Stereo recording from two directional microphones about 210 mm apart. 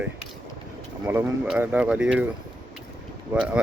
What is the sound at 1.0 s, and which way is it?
Speech, 10° right (ahead or behind).